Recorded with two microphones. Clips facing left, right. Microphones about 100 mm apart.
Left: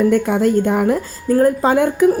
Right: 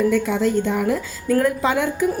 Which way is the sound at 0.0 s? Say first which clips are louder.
Left 4 dB; 50° left (ahead or behind).